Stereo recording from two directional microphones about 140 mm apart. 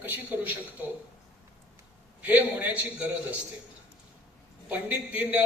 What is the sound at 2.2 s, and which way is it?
A man's voice, 10° right (ahead or behind).